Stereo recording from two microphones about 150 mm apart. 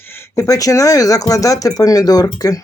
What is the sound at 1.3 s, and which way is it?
Speech, 20° left (ahead or behind).